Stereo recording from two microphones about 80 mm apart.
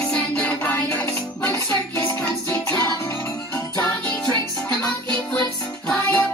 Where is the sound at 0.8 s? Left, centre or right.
Left.